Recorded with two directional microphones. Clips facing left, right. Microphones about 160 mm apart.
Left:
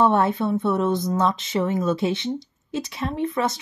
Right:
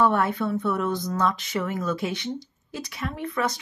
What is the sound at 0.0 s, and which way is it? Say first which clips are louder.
Speech: left 3 dB; 25° left (ahead or behind).